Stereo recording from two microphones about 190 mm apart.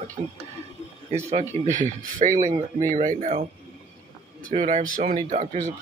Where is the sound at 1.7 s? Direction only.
40° right (ahead or behind).